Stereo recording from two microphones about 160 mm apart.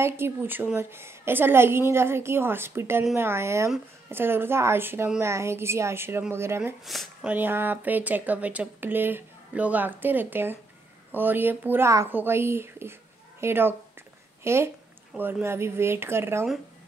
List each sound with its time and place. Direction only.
0.0 s speech: 15° right (ahead or behind)
6.9 s speech: centre (ahead or behind)
7.2 s speech: 10° right (ahead or behind)